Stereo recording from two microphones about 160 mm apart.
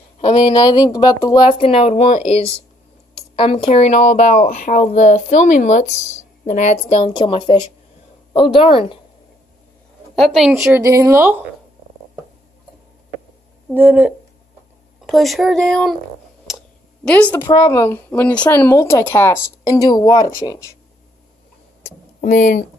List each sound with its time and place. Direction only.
0.5 s a woman's voice: 25° left (ahead or behind)
1.6 s speech: 35° left (ahead or behind)
10.1 s speech: centre (ahead or behind)
10.5 s a woman's voice: 15° right (ahead or behind)
13.7 s a woman's voice: 10° right (ahead or behind)
15.0 s speech: centre (ahead or behind)
16.4 s a sound: 5° left (ahead or behind)
17.5 s a woman's voice: 25° left (ahead or behind)
21.8 s speech: 50° left (ahead or behind)